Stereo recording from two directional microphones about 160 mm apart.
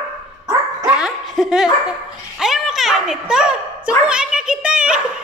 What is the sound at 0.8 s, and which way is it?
Laughter, 5° right (ahead or behind).